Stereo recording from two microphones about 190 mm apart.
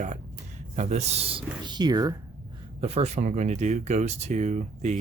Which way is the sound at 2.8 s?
35° right (ahead or behind).